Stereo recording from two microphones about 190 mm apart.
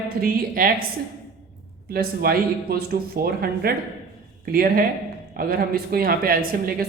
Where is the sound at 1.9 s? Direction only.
55° right (ahead or behind).